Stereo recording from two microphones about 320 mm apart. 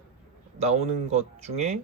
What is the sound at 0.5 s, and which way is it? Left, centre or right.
Speech, centre.